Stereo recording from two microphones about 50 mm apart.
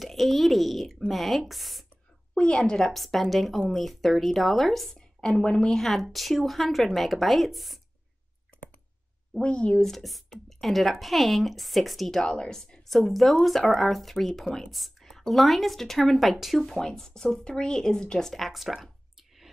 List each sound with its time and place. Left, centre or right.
0.0 s speech: centre
2.3 s speech: centre
2.8 s speech: centre
5.3 s speech: left
5.7 s speech: centre
9.4 s speech: left
9.8 s speech: centre
12.2 s speech: centre
16.7 s speech: centre
18.3 s speech: centre